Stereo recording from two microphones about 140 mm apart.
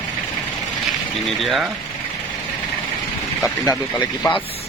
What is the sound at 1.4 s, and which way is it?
Speech, centre (ahead or behind).